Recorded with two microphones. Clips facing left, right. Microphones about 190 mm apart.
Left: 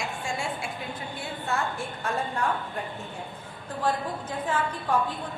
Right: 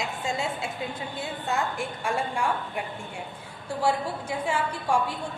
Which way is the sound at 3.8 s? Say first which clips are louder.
Right 2 dB; 10° right (ahead or behind).